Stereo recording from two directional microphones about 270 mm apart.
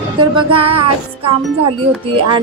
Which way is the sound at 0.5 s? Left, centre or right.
Centre.